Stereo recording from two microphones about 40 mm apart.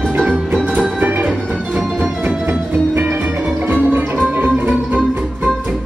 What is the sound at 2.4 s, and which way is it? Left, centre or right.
Music, right.